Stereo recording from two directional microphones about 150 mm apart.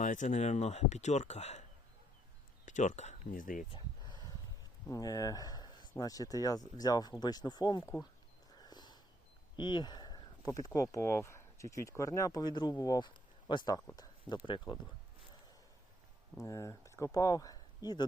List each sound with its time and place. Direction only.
0.0 s speech: 55° left (ahead or behind)
2.6 s speech: 55° left (ahead or behind)
3.7 s a sound: 30° left (ahead or behind)
4.9 s speech: 25° left (ahead or behind)
8.6 s sniff: 30° left (ahead or behind)
9.6 s speech: 30° left (ahead or behind)
16.4 s speech: 20° left (ahead or behind)